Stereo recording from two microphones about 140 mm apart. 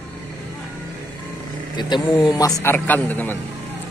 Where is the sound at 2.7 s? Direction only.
10° left (ahead or behind).